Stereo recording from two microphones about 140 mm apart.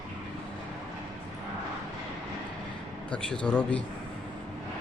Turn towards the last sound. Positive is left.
turn(degrees=10)  # may be behind; listen again after turning